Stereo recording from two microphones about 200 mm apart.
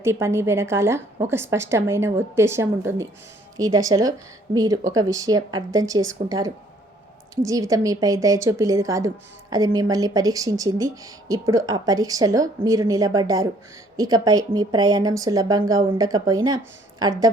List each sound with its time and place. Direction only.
0.0 s a woman's voice: 15° right (ahead or behind)